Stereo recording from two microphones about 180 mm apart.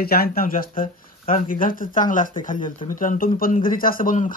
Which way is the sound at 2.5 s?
30° left (ahead or behind).